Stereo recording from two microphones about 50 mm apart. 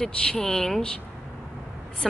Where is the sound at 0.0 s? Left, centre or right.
Centre.